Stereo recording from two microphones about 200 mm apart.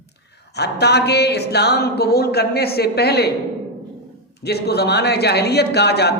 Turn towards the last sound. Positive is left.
turn(degrees=55)  # may be behind; listen again after turning